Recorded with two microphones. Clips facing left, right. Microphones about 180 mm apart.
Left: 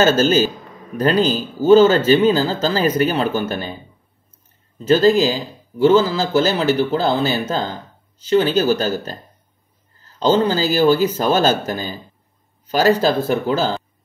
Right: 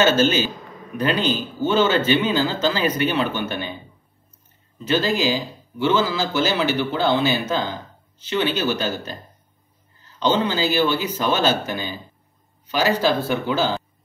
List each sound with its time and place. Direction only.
0.0 s speech: 40° left (ahead or behind)
4.7 s speech: 40° left (ahead or behind)